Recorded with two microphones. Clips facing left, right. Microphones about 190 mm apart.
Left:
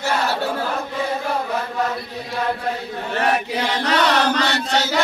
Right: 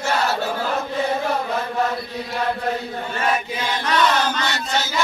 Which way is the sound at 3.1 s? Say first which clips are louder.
Left 3 dB; 65° left (ahead or behind).